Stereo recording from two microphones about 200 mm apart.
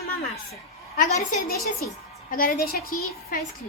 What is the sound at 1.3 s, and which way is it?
A child's voice, 50° left (ahead or behind).